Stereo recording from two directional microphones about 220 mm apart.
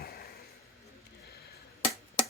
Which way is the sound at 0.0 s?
45° left (ahead or behind).